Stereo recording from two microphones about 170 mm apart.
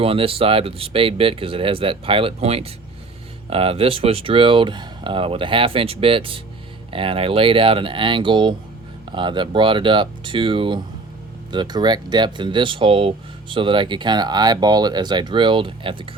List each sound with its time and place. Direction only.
0.0 s speech: 35° right (ahead or behind)